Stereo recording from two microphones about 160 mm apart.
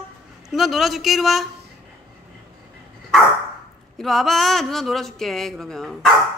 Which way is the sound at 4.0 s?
Centre (ahead or behind).